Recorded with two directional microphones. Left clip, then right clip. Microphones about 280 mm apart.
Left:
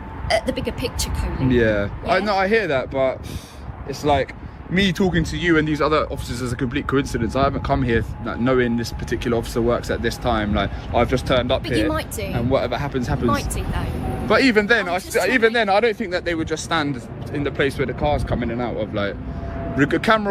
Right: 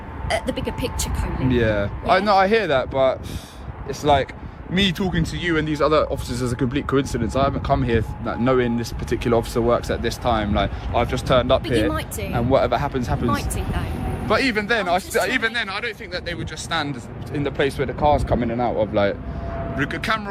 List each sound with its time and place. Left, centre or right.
0.3 s speech: centre
11.6 s speech: centre
12.5 s speech: right
13.3 s speech: centre
16.6 s speech: centre
17.3 s speech: centre
19.7 s speech: centre